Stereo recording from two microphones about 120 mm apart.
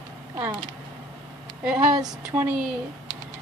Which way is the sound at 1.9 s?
35° right (ahead or behind).